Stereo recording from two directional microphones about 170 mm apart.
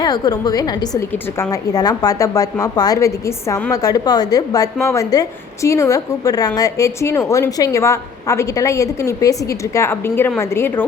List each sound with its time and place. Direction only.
0.0 s a woman's voice: 25° left (ahead or behind)